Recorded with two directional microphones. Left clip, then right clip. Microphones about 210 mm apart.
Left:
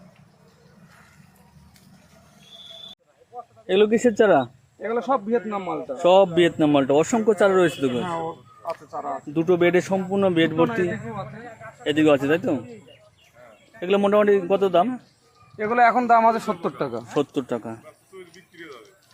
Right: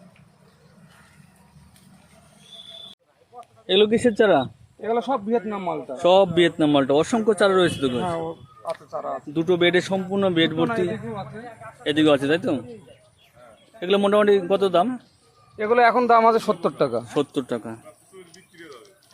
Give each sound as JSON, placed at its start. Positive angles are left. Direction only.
{"t": 3.7, "sound": "a man's voice", "side_deg": 0}
{"t": 4.9, "sound": "speech", "side_deg": -55}
{"t": 6.0, "sound": "a man's voice", "side_deg": 0}
{"t": 9.3, "sound": "a man's voice", "side_deg": 5}
{"t": 11.8, "sound": "a man's voice", "side_deg": -5}
{"t": 13.7, "sound": "a man's voice", "side_deg": -5}
{"t": 15.5, "sound": "a man's voice", "side_deg": -50}
{"t": 17.2, "sound": "a man's voice", "side_deg": 0}
{"t": 18.1, "sound": "a sound", "side_deg": 35}